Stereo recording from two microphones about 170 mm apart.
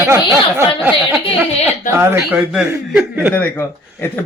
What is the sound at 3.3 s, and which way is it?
Speech, 10° left (ahead or behind).